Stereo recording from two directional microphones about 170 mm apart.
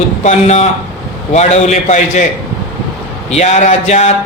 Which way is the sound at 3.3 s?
45° left (ahead or behind).